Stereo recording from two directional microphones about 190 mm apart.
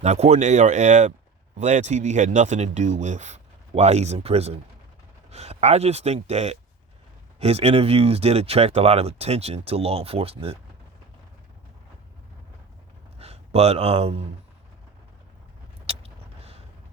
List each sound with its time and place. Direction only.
0.0 s speech: 35° right (ahead or behind)
13.1 s speech: 30° right (ahead or behind)
15.9 s vehicle: 30° right (ahead or behind)